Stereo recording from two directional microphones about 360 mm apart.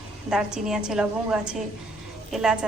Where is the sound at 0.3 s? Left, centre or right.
Centre.